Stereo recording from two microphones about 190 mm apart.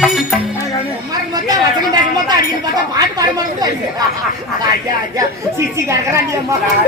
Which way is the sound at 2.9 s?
20° right (ahead or behind).